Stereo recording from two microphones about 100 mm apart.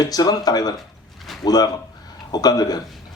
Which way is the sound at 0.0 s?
40° left (ahead or behind).